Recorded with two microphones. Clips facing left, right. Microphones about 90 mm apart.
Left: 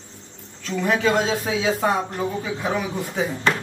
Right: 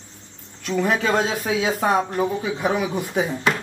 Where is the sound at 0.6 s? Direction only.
15° right (ahead or behind).